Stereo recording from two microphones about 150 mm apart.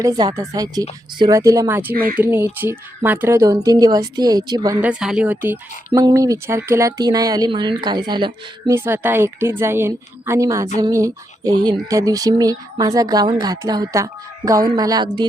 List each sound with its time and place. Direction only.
0.0 s speech: 25° right (ahead or behind)
4.8 s a woman's voice: 5° right (ahead or behind)
5.9 s speech: 25° right (ahead or behind)
8.7 s a woman's voice: 15° right (ahead or behind); by 15.3 s 30° right (ahead or behind)